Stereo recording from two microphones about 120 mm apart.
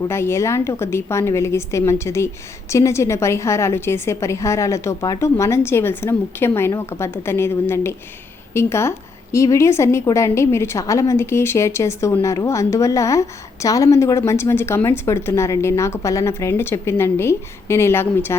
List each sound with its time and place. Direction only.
0.1 s a woman's voice: 20° left (ahead or behind)